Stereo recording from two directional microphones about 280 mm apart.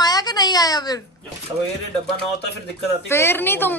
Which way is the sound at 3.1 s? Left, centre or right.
Centre.